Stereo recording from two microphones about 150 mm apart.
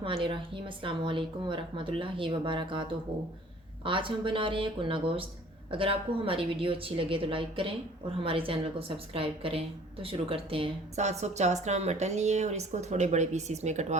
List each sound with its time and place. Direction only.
0.0 s a woman's voice: 35° right (ahead or behind)